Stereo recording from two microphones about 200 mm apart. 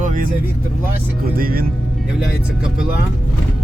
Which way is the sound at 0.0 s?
40° right (ahead or behind).